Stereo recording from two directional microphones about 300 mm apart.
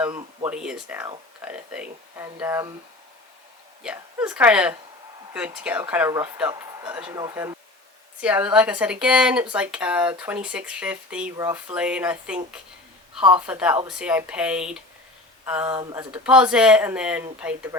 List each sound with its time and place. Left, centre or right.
0.0 s speech: centre
3.8 s speech: centre
13.4 s speech: centre
16.1 s speech: centre